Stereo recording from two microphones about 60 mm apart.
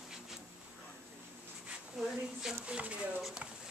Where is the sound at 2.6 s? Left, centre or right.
Centre.